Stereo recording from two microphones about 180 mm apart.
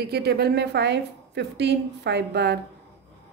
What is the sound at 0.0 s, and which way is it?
A woman's voice, 60° right (ahead or behind).